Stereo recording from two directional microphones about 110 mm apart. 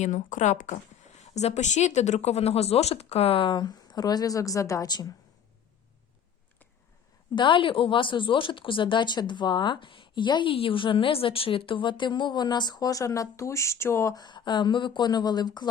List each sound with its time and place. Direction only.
0.0 s speech: 90° left; by 5.1 s 35° left (ahead or behind)
7.3 s speech: 50° left (ahead or behind); by 14.2 s 25° left (ahead or behind)
14.2 s speech: 45° left (ahead or behind)